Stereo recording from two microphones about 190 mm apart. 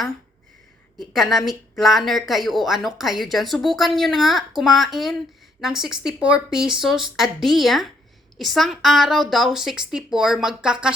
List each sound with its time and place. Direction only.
0.9 s speech: centre (ahead or behind)